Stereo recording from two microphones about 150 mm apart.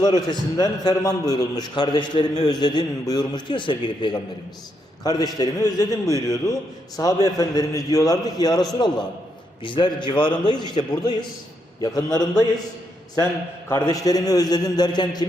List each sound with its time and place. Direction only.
0.0 s a man's voice: 25° left (ahead or behind)
9.6 s a man's voice: 30° left (ahead or behind)
13.7 s a man's voice: 20° left (ahead or behind)